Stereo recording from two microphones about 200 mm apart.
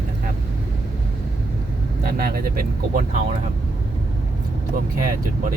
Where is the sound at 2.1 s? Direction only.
50° right (ahead or behind).